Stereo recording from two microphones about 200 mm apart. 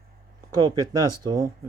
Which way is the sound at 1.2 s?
15° right (ahead or behind).